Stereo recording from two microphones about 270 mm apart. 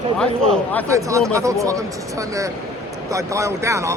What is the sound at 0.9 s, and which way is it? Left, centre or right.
Speech, centre.